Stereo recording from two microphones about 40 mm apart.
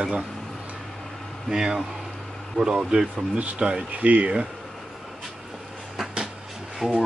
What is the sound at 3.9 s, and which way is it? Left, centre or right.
Speech, right.